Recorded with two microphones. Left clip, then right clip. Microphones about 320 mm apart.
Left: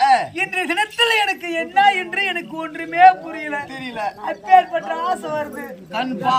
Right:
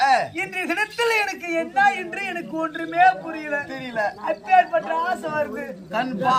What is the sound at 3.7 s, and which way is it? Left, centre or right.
Speech, centre.